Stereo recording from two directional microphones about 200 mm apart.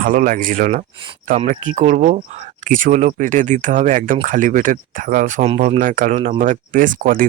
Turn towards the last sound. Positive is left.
turn(degrees=-45)  # may be behind; listen again after turning